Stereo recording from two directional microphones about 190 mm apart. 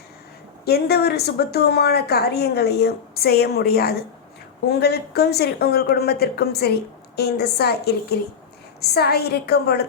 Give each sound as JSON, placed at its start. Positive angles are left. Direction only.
{"t": 0.6, "sound": "a woman's voice", "side_deg": 55}